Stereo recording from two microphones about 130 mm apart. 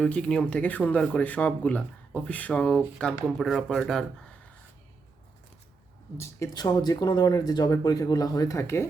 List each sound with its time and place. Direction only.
0.0 s speech: 10° left (ahead or behind)
6.1 s speech: 25° left (ahead or behind)